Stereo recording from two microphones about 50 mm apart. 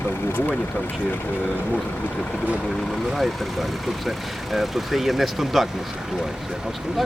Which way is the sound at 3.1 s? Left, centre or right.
Centre.